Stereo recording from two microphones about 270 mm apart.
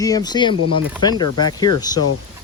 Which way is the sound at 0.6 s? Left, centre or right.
Right.